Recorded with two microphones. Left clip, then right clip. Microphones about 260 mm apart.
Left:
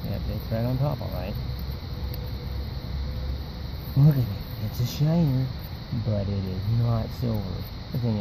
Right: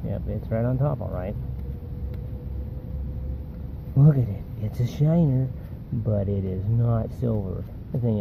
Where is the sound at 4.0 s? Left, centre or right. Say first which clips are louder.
Right 2 dB; centre.